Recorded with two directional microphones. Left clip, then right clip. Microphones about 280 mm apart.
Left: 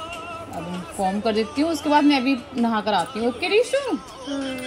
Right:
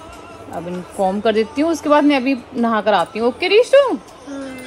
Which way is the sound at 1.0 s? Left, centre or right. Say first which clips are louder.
Right 6 dB; right.